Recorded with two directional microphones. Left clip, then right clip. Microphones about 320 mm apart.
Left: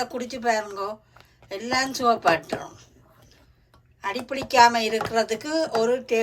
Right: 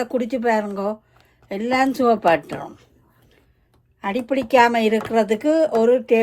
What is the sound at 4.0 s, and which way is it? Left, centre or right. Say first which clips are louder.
A woman's voice: right 6 dB; right.